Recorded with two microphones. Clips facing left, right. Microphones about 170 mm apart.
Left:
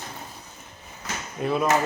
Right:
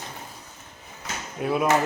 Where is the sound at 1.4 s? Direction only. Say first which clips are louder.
Even; 5° right (ahead or behind).